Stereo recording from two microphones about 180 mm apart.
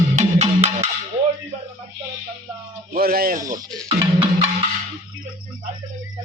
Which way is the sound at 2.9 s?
55° right (ahead or behind).